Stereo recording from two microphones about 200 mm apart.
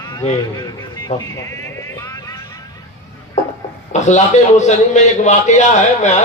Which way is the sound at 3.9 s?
35° left (ahead or behind).